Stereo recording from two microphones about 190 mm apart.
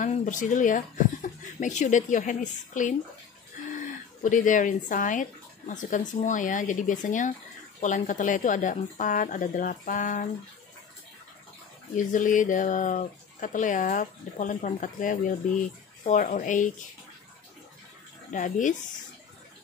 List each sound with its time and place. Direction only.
0.0 s speech: 40° left (ahead or behind)
4.2 s speech: 40° left (ahead or behind)
11.9 s speech: 40° left (ahead or behind)
18.3 s speech: 40° left (ahead or behind)